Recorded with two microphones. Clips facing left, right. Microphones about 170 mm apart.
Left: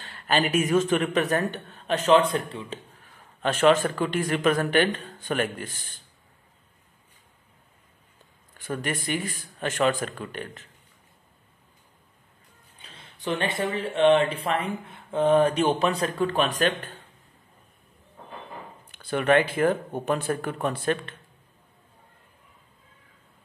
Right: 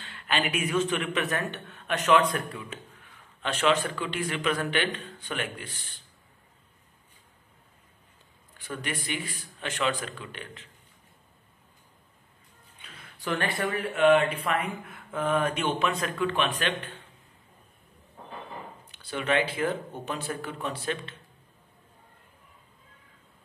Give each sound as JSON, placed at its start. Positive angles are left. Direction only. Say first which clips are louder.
{"t": 0.0, "sound": "speech", "louder": "left 5 dB", "side_deg": 40}
{"t": 8.5, "sound": "speech", "louder": "left 5 dB", "side_deg": 45}
{"t": 12.8, "sound": "speech", "louder": "left 3 dB", "side_deg": 25}
{"t": 18.9, "sound": "speech", "louder": "left 7 dB", "side_deg": 50}